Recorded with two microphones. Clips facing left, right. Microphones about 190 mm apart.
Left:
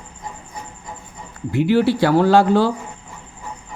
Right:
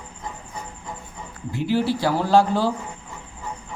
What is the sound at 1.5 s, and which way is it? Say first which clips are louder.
Speech: left 6 dB; 65° left (ahead or behind).